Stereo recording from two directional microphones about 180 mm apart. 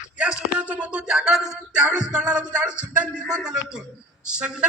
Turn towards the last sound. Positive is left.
turn(degrees=-5)  # may be behind; listen again after turning